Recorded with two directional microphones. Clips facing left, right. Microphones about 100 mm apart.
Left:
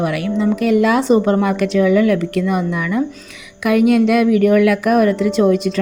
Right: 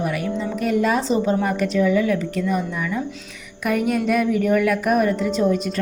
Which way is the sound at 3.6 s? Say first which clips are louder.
Left 8 dB; 90° left.